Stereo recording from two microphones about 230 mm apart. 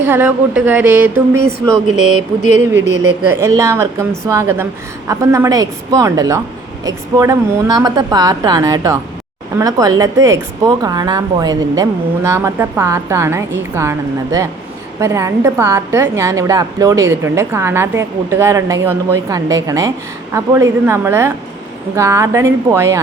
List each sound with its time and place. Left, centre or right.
0.0 s a woman's voice: centre
3.2 s a woman's voice: centre